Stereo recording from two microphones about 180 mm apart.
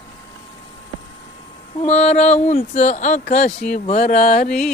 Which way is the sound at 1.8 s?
40° left (ahead or behind).